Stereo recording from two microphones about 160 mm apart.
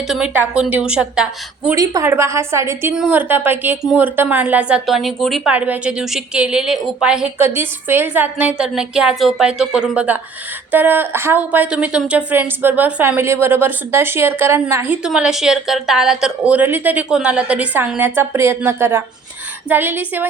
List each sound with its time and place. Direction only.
0.1 s a woman's voice: 5° right (ahead or behind)
1.7 s a woman's voice: 20° right (ahead or behind)